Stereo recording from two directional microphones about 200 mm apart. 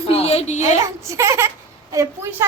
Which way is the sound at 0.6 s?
15° right (ahead or behind).